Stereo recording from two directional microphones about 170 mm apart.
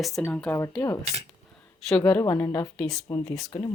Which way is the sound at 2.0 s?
15° left (ahead or behind).